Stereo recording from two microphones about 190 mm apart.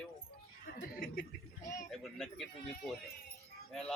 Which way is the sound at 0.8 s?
50° left (ahead or behind).